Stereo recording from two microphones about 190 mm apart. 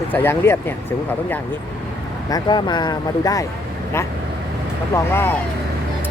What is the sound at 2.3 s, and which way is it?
Speech, 25° left (ahead or behind).